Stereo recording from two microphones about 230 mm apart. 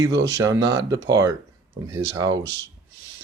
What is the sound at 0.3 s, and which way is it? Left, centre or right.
Speech, centre.